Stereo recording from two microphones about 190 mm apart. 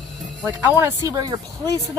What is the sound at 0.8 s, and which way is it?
Speech, 20° right (ahead or behind).